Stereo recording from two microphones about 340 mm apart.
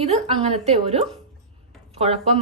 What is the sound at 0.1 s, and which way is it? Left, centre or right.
A woman's voice, centre.